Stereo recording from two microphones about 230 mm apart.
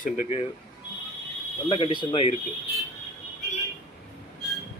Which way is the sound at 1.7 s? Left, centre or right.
Left.